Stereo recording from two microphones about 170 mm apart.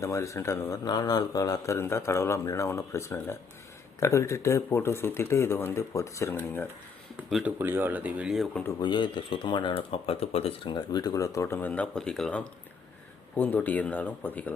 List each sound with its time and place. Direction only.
0.0 s speech: 15° left (ahead or behind)
7.3 s speech: centre (ahead or behind)
7.6 s speech: 15° right (ahead or behind)
8.8 s speech: 30° left (ahead or behind); by 14.5 s 10° left (ahead or behind)